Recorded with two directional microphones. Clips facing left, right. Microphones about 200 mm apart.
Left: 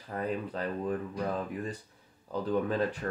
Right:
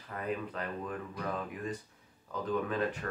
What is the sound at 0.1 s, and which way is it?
Speech, 30° left (ahead or behind).